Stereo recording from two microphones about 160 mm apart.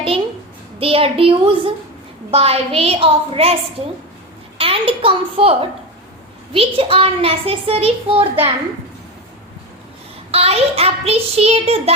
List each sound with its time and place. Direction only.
0.8 s a woman's voice: 35° right (ahead or behind)
4.5 s a child's voice: 35° right (ahead or behind)
10.3 s a woman's voice: 40° right (ahead or behind)